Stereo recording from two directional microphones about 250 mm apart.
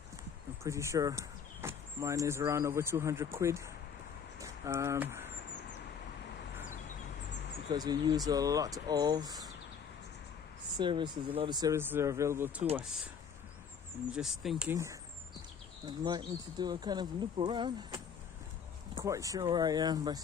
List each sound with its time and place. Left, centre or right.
0.6 s speech: centre
4.4 s a sound: centre
7.7 s speech: centre
10.8 s speech: centre
14.2 s speech: centre